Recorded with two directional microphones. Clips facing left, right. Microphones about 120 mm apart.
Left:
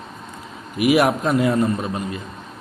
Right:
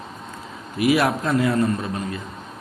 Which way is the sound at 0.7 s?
15° left (ahead or behind).